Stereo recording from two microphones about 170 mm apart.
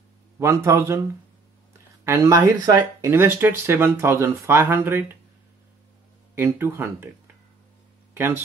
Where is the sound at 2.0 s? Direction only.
15° right (ahead or behind).